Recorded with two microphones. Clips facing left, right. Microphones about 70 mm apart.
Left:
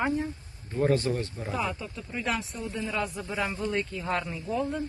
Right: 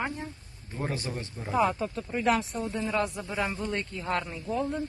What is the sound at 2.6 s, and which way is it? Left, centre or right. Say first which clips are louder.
Speech: right 3 dB; right.